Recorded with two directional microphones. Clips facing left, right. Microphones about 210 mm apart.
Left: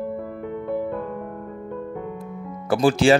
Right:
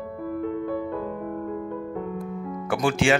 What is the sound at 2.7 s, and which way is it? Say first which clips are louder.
Speech: left 5 dB; 35° left (ahead or behind).